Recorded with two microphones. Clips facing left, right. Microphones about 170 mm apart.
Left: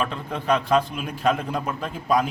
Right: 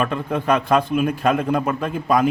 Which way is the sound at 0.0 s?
55° right (ahead or behind).